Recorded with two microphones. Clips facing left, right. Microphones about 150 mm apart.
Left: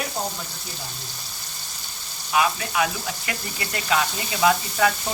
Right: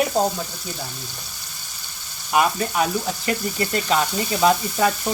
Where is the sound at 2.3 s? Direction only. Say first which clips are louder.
Right 3 dB; 35° right (ahead or behind).